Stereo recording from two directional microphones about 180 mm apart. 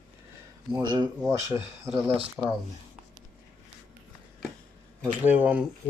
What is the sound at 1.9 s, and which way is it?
Speech, centre (ahead or behind).